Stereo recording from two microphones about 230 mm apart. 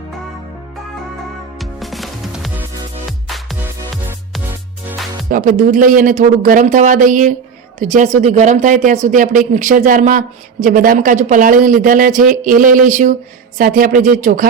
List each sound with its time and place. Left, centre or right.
1.5 s music: centre
5.3 s speech: right